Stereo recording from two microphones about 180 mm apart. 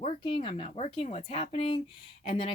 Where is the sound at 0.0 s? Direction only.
30° left (ahead or behind).